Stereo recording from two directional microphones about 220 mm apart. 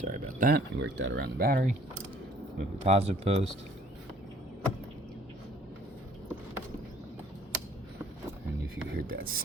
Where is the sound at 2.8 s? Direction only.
25° right (ahead or behind).